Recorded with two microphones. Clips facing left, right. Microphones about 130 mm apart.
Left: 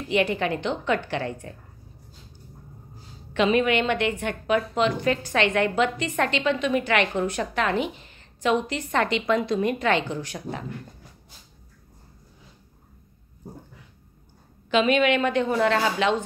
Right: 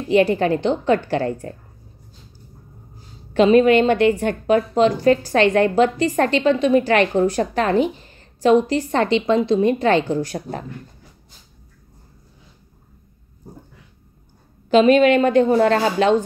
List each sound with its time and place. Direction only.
0.1 s a woman's voice: 35° right (ahead or behind)
3.3 s a woman's voice: 35° right (ahead or behind)
14.7 s a woman's voice: 40° right (ahead or behind)